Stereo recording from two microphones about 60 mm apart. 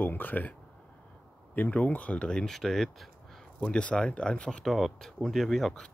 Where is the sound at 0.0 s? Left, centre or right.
Left.